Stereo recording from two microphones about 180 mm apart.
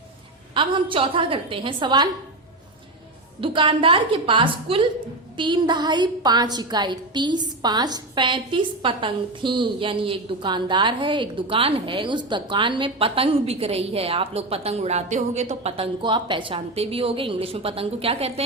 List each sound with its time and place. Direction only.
0.5 s a woman's voice: 30° right (ahead or behind)
3.4 s a woman's voice: 30° right (ahead or behind)